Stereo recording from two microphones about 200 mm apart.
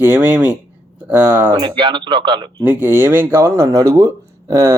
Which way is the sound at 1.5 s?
25° right (ahead or behind).